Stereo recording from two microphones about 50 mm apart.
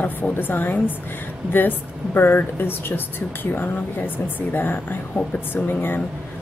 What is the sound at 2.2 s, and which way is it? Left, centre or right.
A woman's voice, left.